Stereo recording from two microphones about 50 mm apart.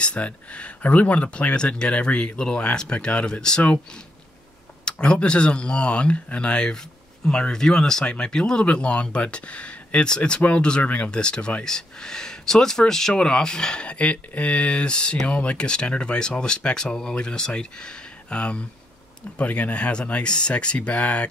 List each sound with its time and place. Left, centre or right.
0.0 s speech: left
4.8 s speech: centre
10.8 s speech: left
11.1 s speech: centre